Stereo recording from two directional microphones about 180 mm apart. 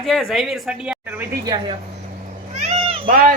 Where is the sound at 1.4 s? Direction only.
25° right (ahead or behind).